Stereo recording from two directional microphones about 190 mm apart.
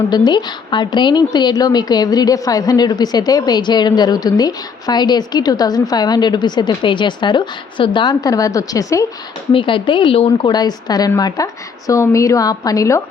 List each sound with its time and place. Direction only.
0.1 s a woman's voice: 20° left (ahead or behind)